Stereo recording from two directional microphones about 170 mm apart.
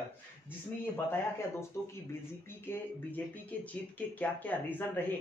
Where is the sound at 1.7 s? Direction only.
20° left (ahead or behind).